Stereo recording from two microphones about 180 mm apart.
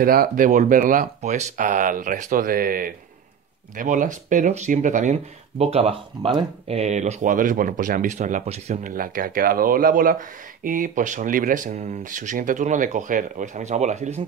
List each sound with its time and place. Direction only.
0.0 s speech: 55° right (ahead or behind)
8.9 s speech: 50° right (ahead or behind)